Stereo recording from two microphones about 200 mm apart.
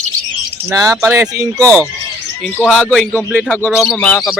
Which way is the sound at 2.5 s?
5° left (ahead or behind).